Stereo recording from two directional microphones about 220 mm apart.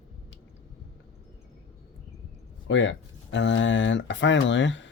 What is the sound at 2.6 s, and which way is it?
Speech, 60° left (ahead or behind).